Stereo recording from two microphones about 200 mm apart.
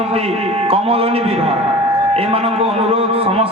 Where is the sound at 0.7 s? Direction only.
30° right (ahead or behind).